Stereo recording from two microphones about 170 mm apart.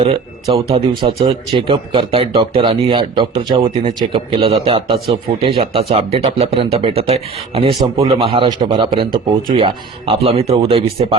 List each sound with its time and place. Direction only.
0.5 s speech: 35° right (ahead or behind)